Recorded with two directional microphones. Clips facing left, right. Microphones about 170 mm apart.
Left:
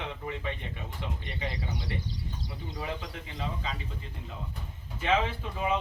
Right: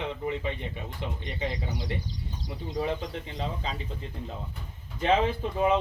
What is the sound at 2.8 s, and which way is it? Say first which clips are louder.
Speech: right 8 dB; 25° right (ahead or behind).